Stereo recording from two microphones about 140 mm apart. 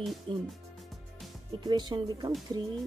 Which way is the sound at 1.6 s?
30° right (ahead or behind).